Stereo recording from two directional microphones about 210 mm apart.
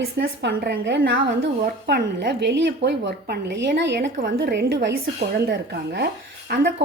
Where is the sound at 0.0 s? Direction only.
50° right (ahead or behind).